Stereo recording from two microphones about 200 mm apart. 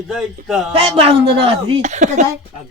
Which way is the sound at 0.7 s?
30° right (ahead or behind).